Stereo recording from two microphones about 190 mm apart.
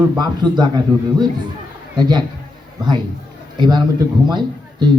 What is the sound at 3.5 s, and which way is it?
A man's voice, 25° right (ahead or behind).